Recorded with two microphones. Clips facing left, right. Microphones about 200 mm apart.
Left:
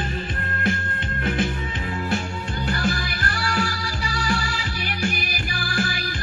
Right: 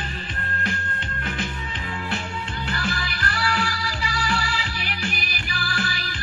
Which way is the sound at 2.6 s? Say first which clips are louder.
Left 5 dB; 45° left (ahead or behind).